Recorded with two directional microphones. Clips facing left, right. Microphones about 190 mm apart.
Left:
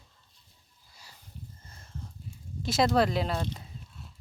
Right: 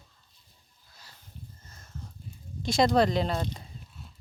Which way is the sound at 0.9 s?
10° left (ahead or behind).